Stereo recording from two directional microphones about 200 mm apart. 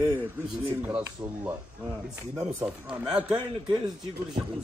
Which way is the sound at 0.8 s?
10° right (ahead or behind).